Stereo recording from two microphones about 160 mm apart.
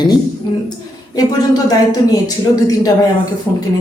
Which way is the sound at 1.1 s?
25° left (ahead or behind).